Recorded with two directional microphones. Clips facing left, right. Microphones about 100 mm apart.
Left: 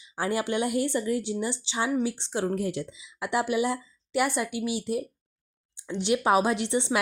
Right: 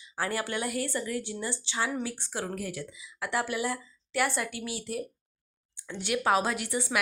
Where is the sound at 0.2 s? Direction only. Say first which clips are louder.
Left 5 dB; 20° left (ahead or behind).